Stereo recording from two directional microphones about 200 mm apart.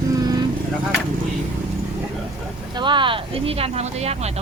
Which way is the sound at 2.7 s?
25° right (ahead or behind).